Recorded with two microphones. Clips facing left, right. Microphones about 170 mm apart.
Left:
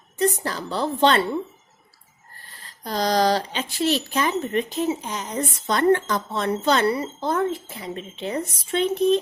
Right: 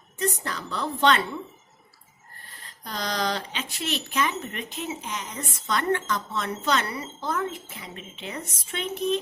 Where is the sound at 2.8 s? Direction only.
35° left (ahead or behind).